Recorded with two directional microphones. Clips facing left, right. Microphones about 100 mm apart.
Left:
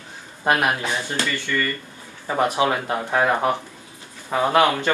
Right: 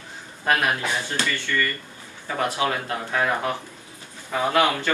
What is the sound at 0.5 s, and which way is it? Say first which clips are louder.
Speech: left 2 dB; 20° left (ahead or behind).